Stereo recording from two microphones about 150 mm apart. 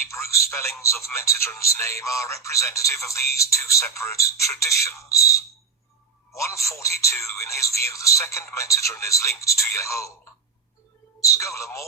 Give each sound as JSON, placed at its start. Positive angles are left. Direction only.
{"t": 0.1, "sound": "speech", "side_deg": 20}
{"t": 11.2, "sound": "speech", "side_deg": 20}